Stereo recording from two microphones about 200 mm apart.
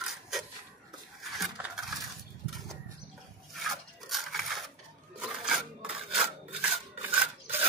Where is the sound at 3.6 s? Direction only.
Centre (ahead or behind).